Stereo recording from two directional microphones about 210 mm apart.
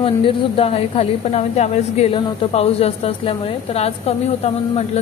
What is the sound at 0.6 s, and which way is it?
A woman's voice, 30° left (ahead or behind).